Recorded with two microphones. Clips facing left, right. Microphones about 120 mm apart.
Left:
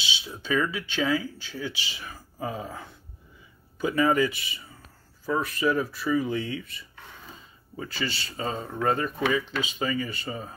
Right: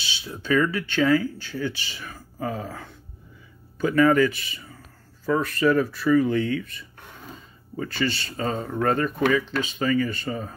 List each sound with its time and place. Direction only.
0.3 s speech: 10° left (ahead or behind)
7.7 s speech: 5° left (ahead or behind)